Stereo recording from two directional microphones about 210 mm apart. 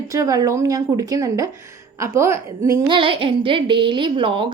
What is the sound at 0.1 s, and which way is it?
A woman's voice, 15° right (ahead or behind).